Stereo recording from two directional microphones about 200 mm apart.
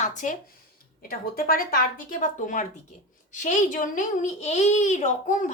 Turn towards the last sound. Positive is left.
turn(degrees=35)  # may be behind; listen again after turning